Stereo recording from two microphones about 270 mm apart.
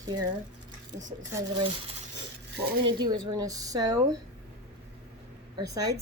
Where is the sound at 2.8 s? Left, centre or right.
Centre.